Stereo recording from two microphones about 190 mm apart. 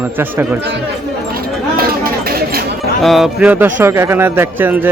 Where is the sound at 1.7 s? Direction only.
50° right (ahead or behind).